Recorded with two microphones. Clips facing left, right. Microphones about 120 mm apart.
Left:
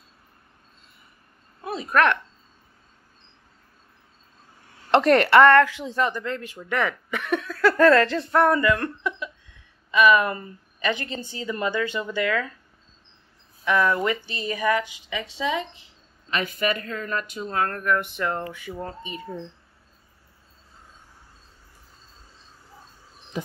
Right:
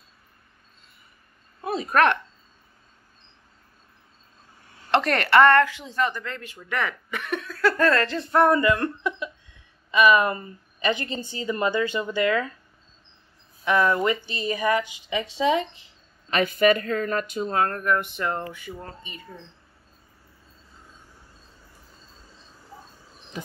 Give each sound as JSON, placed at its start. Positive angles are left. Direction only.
{"t": 1.6, "sound": "speech", "side_deg": -25}
{"t": 4.9, "sound": "a woman's voice", "side_deg": 20}
{"t": 5.4, "sound": "speech", "side_deg": 0}
{"t": 5.8, "sound": "speech", "side_deg": 20}
{"t": 8.3, "sound": "a woman's voice", "side_deg": -10}
{"t": 13.7, "sound": "a woman's voice", "side_deg": -25}
{"t": 17.1, "sound": "a woman's voice", "side_deg": -30}
{"t": 18.1, "sound": "speech", "side_deg": -5}